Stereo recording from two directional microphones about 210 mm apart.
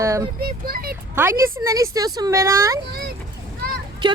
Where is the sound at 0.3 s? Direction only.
45° right (ahead or behind).